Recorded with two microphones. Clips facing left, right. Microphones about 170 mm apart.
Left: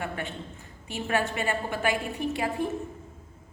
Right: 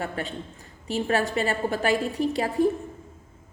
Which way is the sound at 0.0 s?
35° right (ahead or behind).